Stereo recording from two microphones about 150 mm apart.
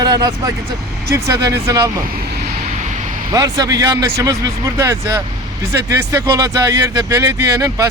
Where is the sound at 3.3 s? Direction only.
25° right (ahead or behind).